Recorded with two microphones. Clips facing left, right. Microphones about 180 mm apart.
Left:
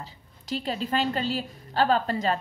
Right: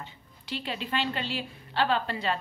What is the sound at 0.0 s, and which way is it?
A woman's voice, 40° left (ahead or behind).